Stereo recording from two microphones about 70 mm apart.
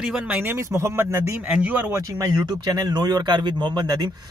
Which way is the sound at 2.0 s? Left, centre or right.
Right.